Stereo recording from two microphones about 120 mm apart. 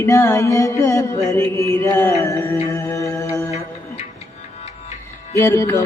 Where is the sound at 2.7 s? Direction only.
25° left (ahead or behind).